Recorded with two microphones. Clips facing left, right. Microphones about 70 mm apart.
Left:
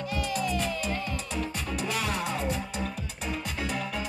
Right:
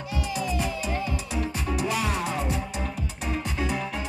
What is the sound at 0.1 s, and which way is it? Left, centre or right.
Music, left.